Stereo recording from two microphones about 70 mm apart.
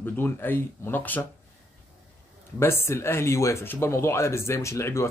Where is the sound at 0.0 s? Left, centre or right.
Left.